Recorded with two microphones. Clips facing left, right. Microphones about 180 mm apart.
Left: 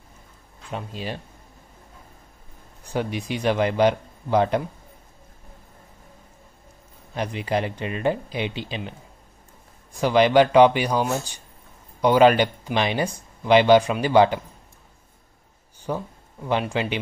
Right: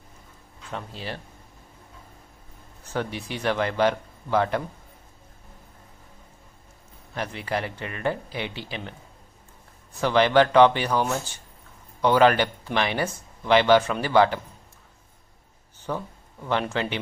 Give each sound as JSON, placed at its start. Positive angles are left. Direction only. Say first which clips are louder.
{"t": 0.7, "sound": "speech", "louder": "left 3 dB", "side_deg": 15}
{"t": 2.8, "sound": "speech", "louder": "left 3 dB", "side_deg": 15}
{"t": 7.2, "sound": "speech", "louder": "left 4 dB", "side_deg": 20}
{"t": 9.9, "sound": "speech", "louder": "left 2 dB", "side_deg": 15}
{"t": 15.8, "sound": "speech", "louder": "left 2 dB", "side_deg": 10}